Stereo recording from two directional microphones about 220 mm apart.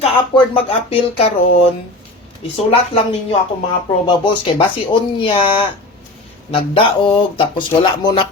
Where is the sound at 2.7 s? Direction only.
25° left (ahead or behind).